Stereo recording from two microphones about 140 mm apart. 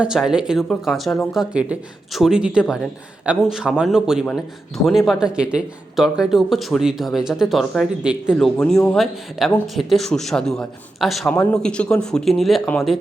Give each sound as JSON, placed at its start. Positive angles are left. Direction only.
{"t": 0.0, "sound": "speech", "side_deg": -5}
{"t": 11.3, "sound": "speech", "side_deg": 20}
{"t": 11.6, "sound": "speech", "side_deg": 5}